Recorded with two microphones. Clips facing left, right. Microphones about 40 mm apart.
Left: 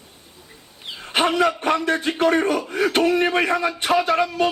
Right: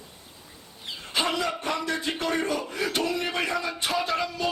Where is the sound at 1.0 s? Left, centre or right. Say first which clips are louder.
Left 8 dB; left.